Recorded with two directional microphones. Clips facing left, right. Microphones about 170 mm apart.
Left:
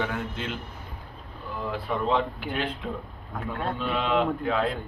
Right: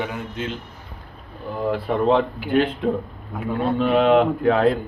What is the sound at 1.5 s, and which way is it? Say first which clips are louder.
Speech: right 8 dB; 55° right (ahead or behind).